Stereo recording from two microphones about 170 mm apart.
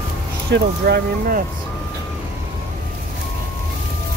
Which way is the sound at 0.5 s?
70° right (ahead or behind).